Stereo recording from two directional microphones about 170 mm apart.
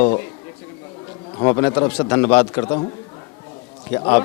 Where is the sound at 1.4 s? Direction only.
25° left (ahead or behind).